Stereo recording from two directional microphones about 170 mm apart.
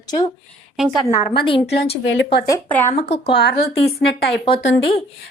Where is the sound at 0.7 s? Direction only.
Centre (ahead or behind).